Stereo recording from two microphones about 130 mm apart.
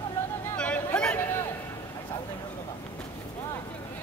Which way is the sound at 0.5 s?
10° left (ahead or behind).